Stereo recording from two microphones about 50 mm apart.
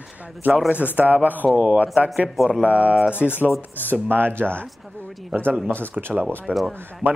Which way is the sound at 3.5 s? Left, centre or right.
Left.